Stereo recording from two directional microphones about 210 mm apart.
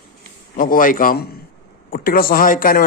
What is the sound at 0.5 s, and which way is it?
A man's voice, 40° left (ahead or behind).